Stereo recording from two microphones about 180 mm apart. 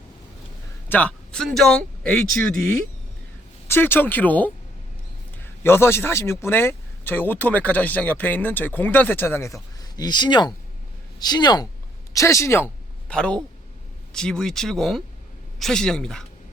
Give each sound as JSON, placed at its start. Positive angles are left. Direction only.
{"t": 0.9, "sound": "speech", "side_deg": 10}
{"t": 3.7, "sound": "a man's voice", "side_deg": 10}